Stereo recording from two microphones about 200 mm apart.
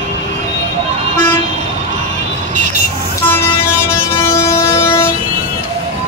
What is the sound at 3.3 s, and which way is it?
Vehicle, 10° left (ahead or behind).